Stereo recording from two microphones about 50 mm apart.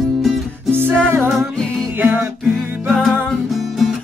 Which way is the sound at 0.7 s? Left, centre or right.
Right.